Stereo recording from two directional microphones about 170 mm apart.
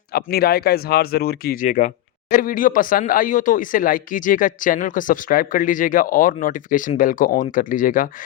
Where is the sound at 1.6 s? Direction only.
45° left (ahead or behind).